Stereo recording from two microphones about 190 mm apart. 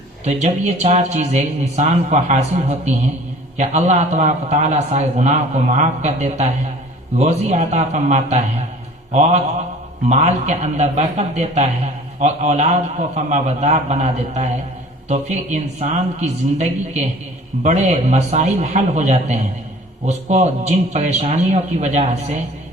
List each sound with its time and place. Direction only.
0.3 s a man's voice: 35° right (ahead or behind)